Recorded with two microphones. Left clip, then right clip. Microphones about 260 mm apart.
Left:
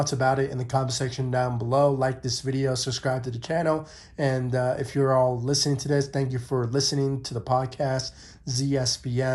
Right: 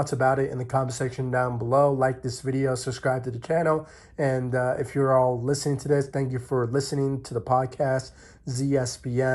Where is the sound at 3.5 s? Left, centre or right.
Left.